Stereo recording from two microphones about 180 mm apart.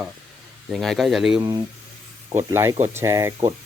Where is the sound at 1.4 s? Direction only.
25° right (ahead or behind).